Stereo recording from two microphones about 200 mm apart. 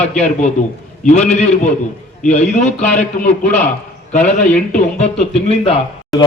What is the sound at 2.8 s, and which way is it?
Speech, 5° left (ahead or behind).